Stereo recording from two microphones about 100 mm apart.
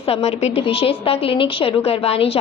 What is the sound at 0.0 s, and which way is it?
A woman's voice, 85° left.